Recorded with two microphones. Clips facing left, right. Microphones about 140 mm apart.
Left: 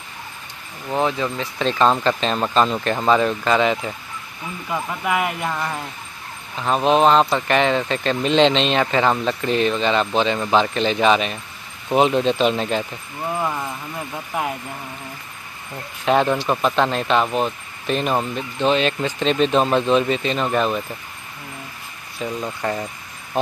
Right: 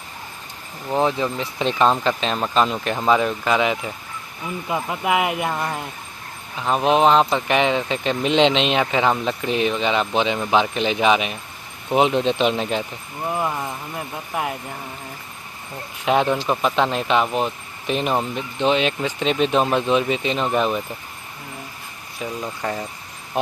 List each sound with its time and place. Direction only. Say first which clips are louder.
0.8 s speech: right 1 dB; 15° right (ahead or behind)
4.6 s speech: right 1 dB; 20° right (ahead or behind)
12.1 s speech: left 1 dB; 5° left (ahead or behind)
16.1 s speech: left 1 dB; 5° right (ahead or behind)
22.2 s speech: left 2 dB; 10° right (ahead or behind)